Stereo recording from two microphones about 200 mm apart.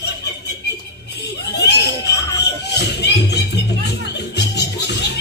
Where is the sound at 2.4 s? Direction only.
55° left (ahead or behind).